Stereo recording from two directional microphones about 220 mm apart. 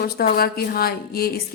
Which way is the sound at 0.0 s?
45° left (ahead or behind).